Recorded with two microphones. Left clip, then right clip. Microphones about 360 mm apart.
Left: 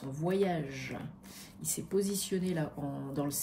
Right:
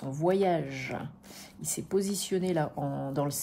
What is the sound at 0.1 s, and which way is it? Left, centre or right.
Speech, right.